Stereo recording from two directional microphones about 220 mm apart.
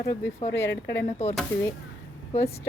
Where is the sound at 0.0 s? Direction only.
10° left (ahead or behind).